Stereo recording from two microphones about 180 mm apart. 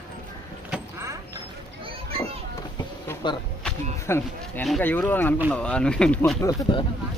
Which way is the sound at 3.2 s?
25° left (ahead or behind).